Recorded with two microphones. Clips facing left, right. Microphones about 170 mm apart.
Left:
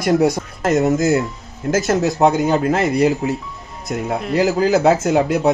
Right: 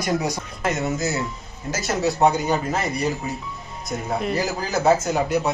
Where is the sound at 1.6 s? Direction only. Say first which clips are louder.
Left 11 dB; 65° left (ahead or behind).